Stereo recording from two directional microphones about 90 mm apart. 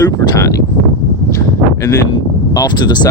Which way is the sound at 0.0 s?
40° left (ahead or behind).